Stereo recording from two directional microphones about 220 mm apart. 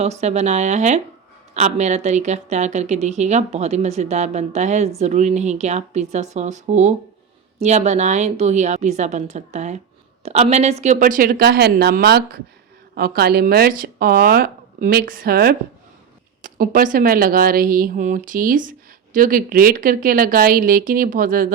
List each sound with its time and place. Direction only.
0.0 s speech: 30° right (ahead or behind)